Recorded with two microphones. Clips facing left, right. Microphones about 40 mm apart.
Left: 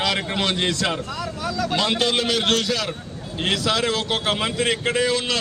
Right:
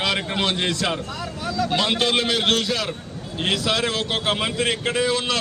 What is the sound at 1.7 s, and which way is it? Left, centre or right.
A man's voice, centre.